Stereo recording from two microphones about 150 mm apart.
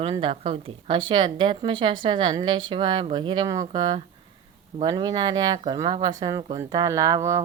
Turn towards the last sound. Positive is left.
turn(degrees=-20)  # may be behind; listen again after turning